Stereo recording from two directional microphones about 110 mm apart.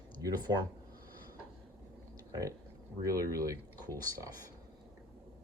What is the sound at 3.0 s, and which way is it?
Speech, 30° right (ahead or behind).